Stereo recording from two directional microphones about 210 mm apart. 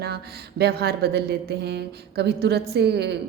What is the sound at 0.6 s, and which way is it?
A woman's voice, 50° right (ahead or behind).